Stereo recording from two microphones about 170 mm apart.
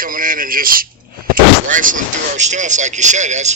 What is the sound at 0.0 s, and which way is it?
Speech, 55° right (ahead or behind).